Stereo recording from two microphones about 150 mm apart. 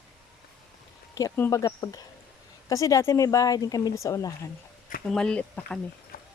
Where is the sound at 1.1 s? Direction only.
20° left (ahead or behind).